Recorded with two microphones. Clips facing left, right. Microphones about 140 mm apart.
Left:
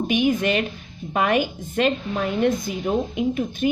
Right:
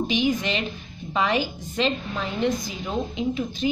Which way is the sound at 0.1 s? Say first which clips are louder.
Left 7 dB; 55° left (ahead or behind).